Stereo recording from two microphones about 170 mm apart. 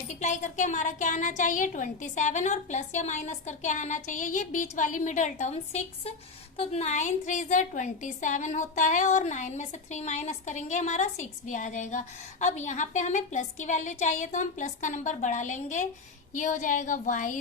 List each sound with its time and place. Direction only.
0.1 s a woman's voice: 45° left (ahead or behind)